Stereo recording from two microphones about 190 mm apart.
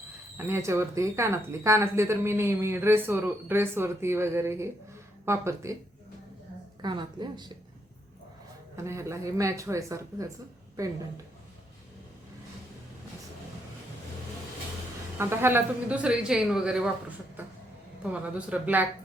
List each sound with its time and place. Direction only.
0.3 s speech: 15° right (ahead or behind)
6.8 s a woman's voice: 25° right (ahead or behind)
8.7 s speech: 15° right (ahead or behind)
15.2 s speech: 15° right (ahead or behind)
18.0 s speech: 5° right (ahead or behind)